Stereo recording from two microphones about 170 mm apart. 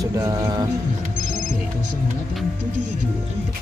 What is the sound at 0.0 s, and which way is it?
Music, 20° right (ahead or behind).